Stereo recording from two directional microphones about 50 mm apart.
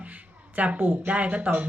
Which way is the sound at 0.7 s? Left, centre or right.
Right.